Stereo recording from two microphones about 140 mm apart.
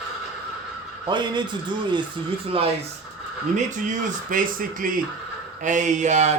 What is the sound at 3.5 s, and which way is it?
Speech, 65° right (ahead or behind).